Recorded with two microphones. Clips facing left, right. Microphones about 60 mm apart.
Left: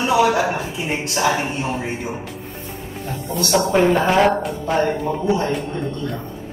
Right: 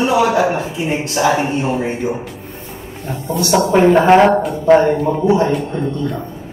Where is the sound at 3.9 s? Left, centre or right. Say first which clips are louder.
Right 6 dB; right.